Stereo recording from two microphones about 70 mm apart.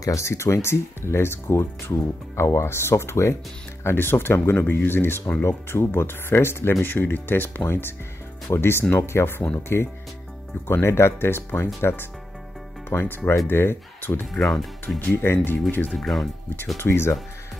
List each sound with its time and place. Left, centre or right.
0.0 s speech: left
14.2 s speech: centre
15.3 s speech: left
15.9 s speech: centre
16.7 s speech: left